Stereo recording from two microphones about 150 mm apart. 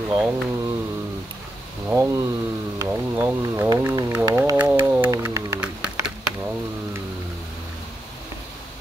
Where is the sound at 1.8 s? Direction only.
20° right (ahead or behind).